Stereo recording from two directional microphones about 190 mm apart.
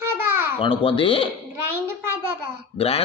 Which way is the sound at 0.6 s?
30° left (ahead or behind).